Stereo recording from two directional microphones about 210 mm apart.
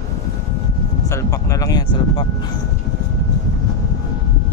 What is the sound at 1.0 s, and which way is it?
Speech, 15° left (ahead or behind).